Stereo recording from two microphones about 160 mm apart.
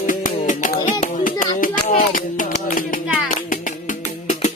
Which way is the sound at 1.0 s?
55° left (ahead or behind).